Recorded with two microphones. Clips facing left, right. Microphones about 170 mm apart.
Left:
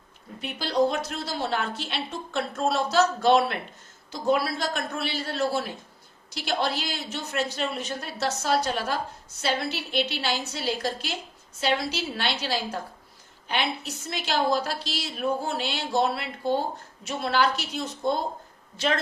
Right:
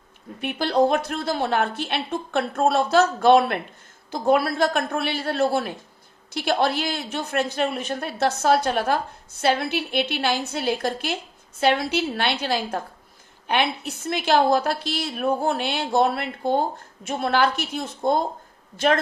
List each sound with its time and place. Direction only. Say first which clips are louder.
0.4 s a woman's voice: right 4 dB; 55° right (ahead or behind)